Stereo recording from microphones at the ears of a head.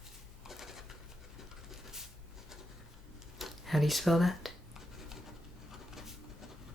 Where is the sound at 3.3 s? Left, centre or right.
Centre.